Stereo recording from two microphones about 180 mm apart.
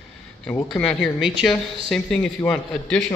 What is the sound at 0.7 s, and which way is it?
Speech, 5° left (ahead or behind).